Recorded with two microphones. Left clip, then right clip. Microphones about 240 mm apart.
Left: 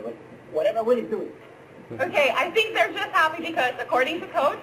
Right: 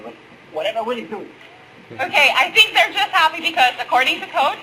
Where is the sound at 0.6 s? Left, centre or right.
Centre.